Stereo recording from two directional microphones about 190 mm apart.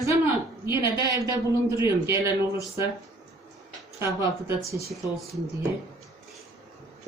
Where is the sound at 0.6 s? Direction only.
15° right (ahead or behind).